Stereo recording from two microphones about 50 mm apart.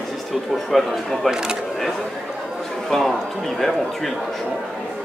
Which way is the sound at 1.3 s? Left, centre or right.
Centre.